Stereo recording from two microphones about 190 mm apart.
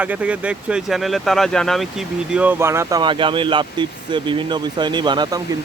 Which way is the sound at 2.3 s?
10° right (ahead or behind).